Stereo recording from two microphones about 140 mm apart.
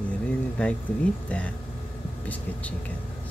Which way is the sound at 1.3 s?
10° left (ahead or behind).